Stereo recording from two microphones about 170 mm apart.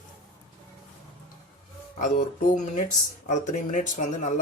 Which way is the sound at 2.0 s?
45° left (ahead or behind).